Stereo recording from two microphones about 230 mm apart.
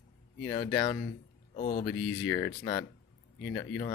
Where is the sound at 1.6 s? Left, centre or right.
Left.